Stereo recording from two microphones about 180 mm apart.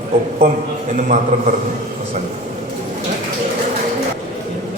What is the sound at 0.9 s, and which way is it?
Speech, 45° right (ahead or behind).